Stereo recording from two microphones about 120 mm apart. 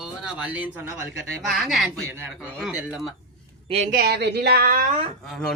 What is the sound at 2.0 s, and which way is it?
Speech, 20° right (ahead or behind).